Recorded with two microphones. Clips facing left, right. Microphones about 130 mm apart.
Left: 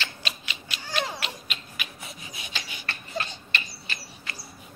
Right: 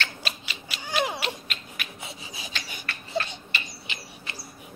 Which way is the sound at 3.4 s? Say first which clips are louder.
Left 1 dB; 15° right (ahead or behind).